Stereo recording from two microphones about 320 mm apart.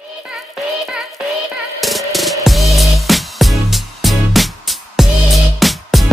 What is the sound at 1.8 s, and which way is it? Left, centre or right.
Music, centre.